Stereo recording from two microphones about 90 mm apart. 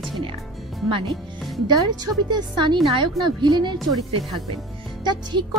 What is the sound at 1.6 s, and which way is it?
A woman's voice, 50° right (ahead or behind).